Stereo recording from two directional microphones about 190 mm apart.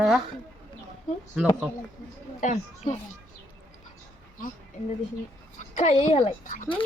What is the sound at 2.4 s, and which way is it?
Speech, 40° left (ahead or behind).